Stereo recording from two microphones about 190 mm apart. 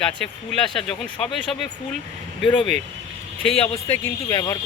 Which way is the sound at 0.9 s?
5° left (ahead or behind).